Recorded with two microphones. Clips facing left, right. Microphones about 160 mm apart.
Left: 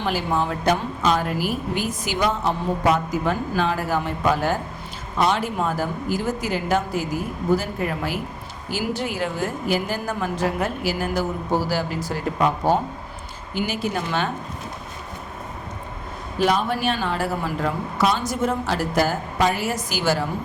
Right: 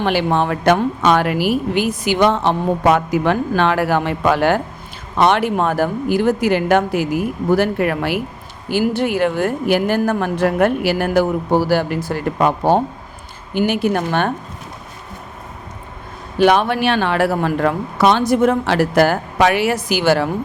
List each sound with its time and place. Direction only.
0.0 s a woman's voice: 70° right (ahead or behind)
8.7 s a woman's voice: 60° right (ahead or behind)
16.4 s a woman's voice: 75° right (ahead or behind)